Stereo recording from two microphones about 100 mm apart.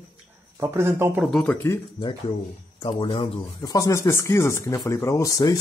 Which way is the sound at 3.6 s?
35° left (ahead or behind).